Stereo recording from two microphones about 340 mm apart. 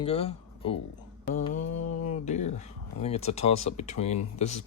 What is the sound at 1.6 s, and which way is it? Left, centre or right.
Mantra, left.